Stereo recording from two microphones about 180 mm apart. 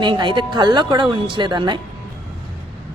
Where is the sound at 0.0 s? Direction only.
25° right (ahead or behind).